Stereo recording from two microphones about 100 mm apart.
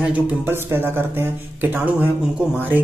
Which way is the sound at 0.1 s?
20° right (ahead or behind).